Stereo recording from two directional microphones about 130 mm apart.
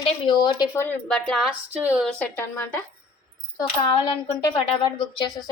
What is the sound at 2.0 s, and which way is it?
Speech, 10° left (ahead or behind).